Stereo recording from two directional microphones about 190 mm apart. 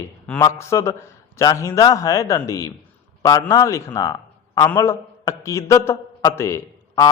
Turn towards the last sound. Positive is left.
turn(degrees=15)  # may be behind; listen again after turning